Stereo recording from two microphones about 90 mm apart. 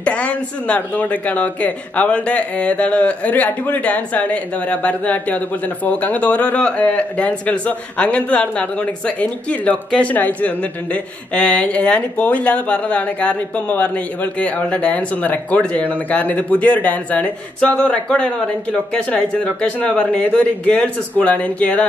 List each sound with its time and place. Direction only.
0.0 s speech: 15° left (ahead or behind)